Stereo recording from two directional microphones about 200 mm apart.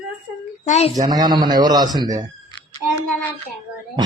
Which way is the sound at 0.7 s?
35° left (ahead or behind).